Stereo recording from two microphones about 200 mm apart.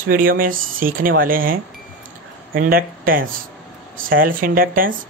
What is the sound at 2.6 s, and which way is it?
Speech, 45° right (ahead or behind).